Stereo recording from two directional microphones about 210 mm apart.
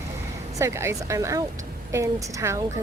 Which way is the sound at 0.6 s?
15° right (ahead or behind).